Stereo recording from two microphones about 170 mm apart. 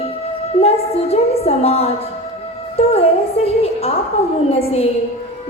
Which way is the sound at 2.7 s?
35° left (ahead or behind).